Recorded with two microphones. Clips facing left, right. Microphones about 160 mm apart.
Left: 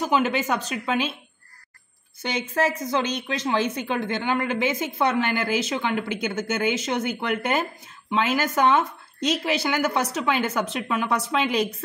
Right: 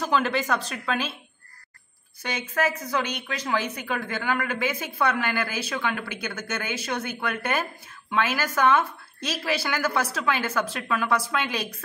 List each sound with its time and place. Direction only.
0.0 s a woman's voice: 20° left (ahead or behind)
2.5 s a woman's voice: 30° left (ahead or behind)